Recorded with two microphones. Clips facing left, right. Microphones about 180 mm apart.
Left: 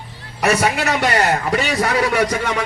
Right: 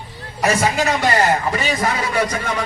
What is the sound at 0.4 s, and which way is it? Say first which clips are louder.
A man's voice: even; 70° left (ahead or behind).